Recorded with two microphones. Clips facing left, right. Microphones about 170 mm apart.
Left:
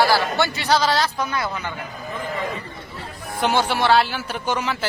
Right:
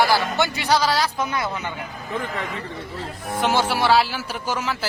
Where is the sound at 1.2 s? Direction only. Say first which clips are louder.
Even; 20° right (ahead or behind).